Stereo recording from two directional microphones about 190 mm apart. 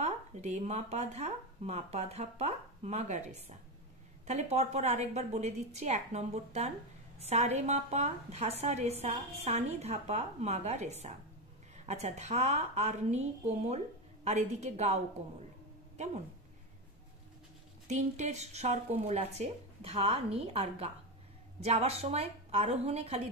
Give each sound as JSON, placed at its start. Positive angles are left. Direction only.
{"t": 0.0, "sound": "speech", "side_deg": -35}
{"t": 17.8, "sound": "speech", "side_deg": -40}